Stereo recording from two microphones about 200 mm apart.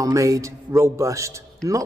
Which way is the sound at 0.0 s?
15° right (ahead or behind).